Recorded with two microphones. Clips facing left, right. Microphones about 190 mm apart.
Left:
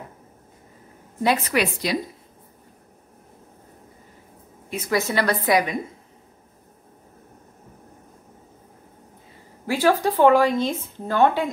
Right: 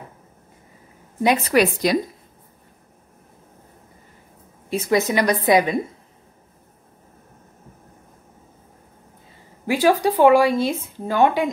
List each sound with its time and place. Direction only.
1.5 s a woman's voice: 45° right (ahead or behind)
4.6 s a woman's voice: 25° right (ahead or behind)
9.7 s speech: 15° right (ahead or behind)